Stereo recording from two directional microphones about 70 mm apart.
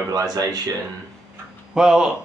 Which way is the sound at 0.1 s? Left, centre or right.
Right.